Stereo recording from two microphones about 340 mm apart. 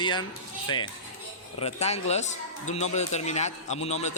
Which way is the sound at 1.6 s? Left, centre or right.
Centre.